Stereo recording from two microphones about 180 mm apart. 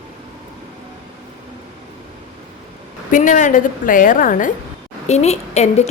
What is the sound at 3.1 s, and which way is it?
A woman's voice, 45° left (ahead or behind).